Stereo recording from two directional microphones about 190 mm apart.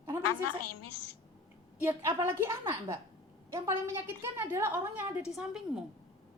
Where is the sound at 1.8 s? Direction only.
15° right (ahead or behind).